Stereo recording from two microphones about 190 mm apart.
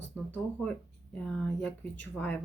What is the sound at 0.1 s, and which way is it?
Speech, 5° left (ahead or behind).